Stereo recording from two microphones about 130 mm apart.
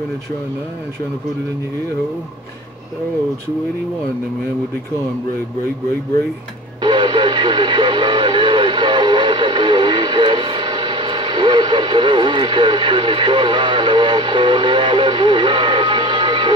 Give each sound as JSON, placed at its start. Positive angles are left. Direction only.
{"t": 6.8, "sound": "radio", "side_deg": -35}